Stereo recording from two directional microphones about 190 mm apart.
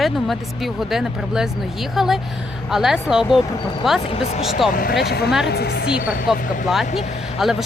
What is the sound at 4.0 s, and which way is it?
Speech, 30° left (ahead or behind).